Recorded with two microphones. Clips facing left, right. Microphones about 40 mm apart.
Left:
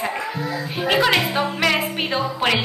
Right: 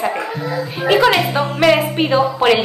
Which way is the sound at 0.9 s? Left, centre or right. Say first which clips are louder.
Right 5 dB; centre.